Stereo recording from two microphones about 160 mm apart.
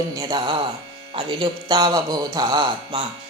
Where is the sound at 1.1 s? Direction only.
30° right (ahead or behind).